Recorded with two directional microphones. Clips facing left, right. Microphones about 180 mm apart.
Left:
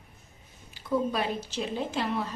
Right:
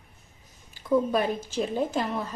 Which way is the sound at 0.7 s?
45° right (ahead or behind).